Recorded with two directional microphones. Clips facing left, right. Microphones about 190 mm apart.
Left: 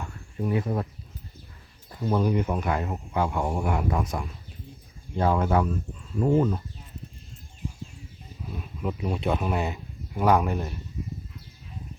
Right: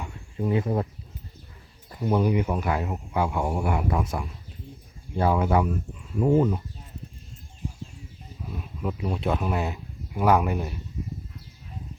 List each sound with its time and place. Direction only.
0.0 s a sound: 20° right (ahead or behind)
2.0 s speech: 10° right (ahead or behind)
8.9 s speech: centre (ahead or behind)